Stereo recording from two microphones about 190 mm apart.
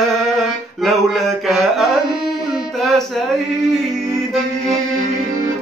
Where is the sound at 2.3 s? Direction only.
Centre (ahead or behind).